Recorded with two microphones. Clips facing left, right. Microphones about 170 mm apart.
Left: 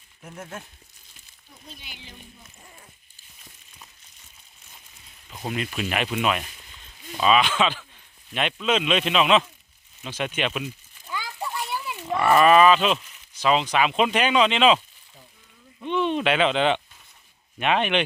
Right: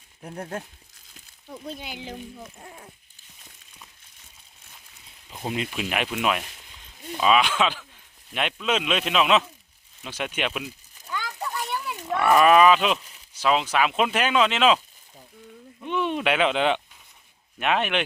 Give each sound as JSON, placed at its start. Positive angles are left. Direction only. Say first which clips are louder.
{"t": 0.2, "sound": "speech", "louder": "right 5 dB", "side_deg": -35}
{"t": 2.0, "sound": "speech", "louder": "right 11 dB", "side_deg": -75}
{"t": 5.7, "sound": "speech", "louder": "left 1 dB", "side_deg": -5}
{"t": 11.1, "sound": "children playing", "louder": "even", "side_deg": 5}
{"t": 13.3, "sound": "speech", "louder": "left 1 dB", "side_deg": -5}
{"t": 15.8, "sound": "speech", "louder": "left 2 dB", "side_deg": -10}